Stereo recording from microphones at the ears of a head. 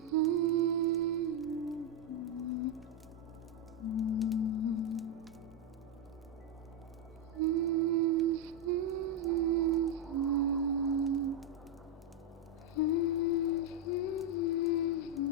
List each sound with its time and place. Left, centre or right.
0.1 s humming: right
2.0 s music: left
3.8 s music: left
7.3 s music: right
10.1 s whale vocalization: right
12.7 s music: left